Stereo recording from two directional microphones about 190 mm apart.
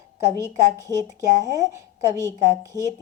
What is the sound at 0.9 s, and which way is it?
A woman's voice, 20° right (ahead or behind).